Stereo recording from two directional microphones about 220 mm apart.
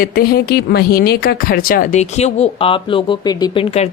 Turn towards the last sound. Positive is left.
turn(degrees=25)  # may be behind; listen again after turning